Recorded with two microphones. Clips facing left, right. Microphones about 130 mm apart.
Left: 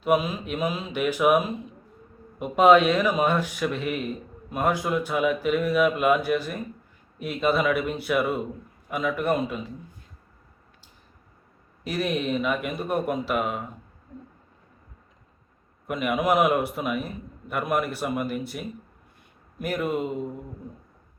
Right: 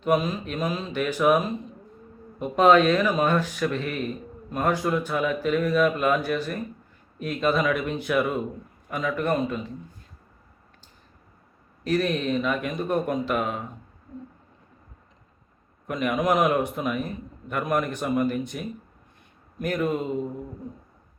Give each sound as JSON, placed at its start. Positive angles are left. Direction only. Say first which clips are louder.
{"t": 0.0, "sound": "speech", "louder": "even", "side_deg": 10}
{"t": 11.8, "sound": "speech", "louder": "right 3 dB", "side_deg": 10}
{"t": 15.9, "sound": "speech", "louder": "even", "side_deg": 5}